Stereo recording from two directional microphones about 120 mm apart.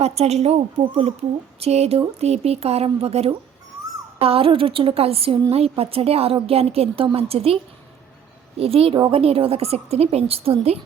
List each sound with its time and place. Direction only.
0.0 s a woman's voice: 60° right (ahead or behind)